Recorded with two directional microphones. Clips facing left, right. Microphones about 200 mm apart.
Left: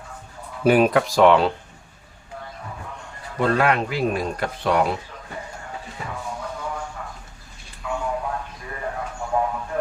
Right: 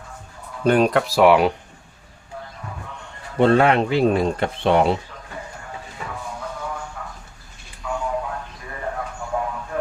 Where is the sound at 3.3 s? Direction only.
25° right (ahead or behind).